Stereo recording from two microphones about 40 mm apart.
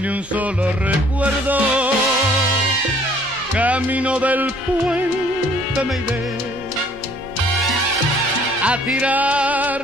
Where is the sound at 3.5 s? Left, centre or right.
Right.